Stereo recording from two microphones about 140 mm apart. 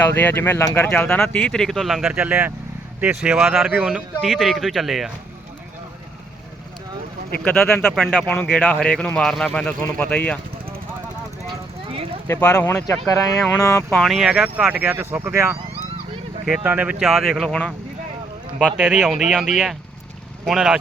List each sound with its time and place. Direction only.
0.0 s speech: 15° left (ahead or behind)
7.4 s speech: 15° left (ahead or behind)
7.9 s speech: centre (ahead or behind)
8.4 s speech: 10° left (ahead or behind)
11.9 s a sound: 40° right (ahead or behind)
12.3 s speech: 20° left (ahead or behind)
13.9 s speech: centre (ahead or behind); by 15.5 s 15° right (ahead or behind)
16.6 s speech: 10° right (ahead or behind)
18.8 s speech: 5° right (ahead or behind)